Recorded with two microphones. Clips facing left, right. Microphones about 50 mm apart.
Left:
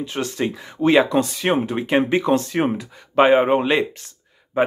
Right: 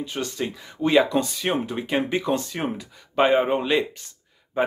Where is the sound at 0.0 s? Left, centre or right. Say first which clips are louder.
Left 4 dB; left.